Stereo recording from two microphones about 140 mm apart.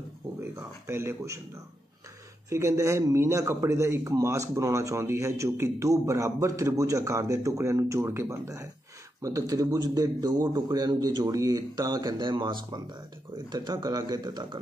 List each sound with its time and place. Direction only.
0.4 s speech: 20° right (ahead or behind)
2.5 s a man's voice: 20° right (ahead or behind)